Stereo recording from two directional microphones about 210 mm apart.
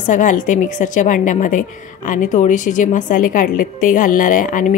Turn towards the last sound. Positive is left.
turn(degrees=40)  # may be behind; listen again after turning